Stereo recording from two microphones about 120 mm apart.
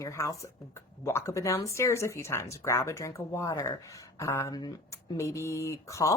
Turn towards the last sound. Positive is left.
turn(degrees=25)  # may be behind; listen again after turning